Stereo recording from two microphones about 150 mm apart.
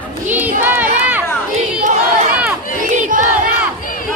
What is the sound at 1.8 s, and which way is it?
Crowd, 55° right (ahead or behind).